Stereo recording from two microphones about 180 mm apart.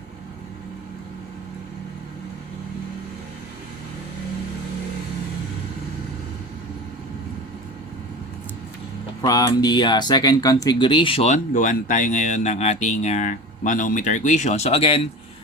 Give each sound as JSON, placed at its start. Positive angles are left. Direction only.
{"t": 9.2, "sound": "speech", "side_deg": 20}